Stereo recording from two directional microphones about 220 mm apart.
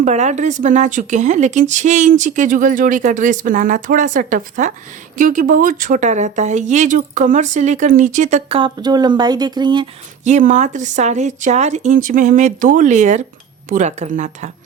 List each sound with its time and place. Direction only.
0.0 s speech: 30° right (ahead or behind)
10.2 s speech: 35° right (ahead or behind)